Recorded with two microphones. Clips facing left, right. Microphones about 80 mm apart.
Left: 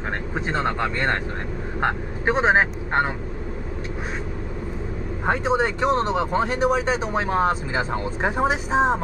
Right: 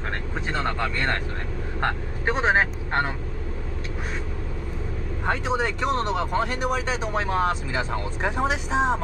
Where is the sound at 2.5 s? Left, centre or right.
Centre.